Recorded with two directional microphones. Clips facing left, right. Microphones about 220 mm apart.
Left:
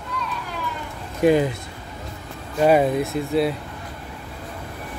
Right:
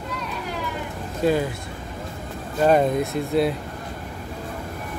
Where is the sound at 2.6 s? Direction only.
5° left (ahead or behind).